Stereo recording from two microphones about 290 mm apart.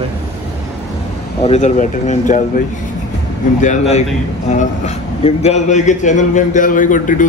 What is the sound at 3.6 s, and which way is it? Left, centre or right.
A man's voice, left.